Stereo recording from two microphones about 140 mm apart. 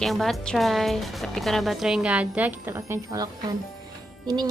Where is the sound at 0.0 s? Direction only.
Centre (ahead or behind).